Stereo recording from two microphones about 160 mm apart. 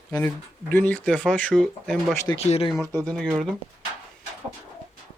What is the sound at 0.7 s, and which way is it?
Speech, 10° left (ahead or behind).